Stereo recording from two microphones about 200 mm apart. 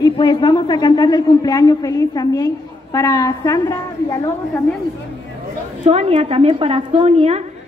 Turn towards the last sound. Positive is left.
turn(degrees=-30)  # may be behind; listen again after turning